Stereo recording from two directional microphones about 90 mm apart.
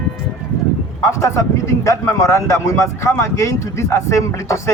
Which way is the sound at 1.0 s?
35° left (ahead or behind).